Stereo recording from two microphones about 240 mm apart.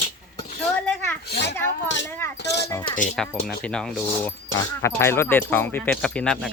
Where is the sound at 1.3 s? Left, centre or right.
Left.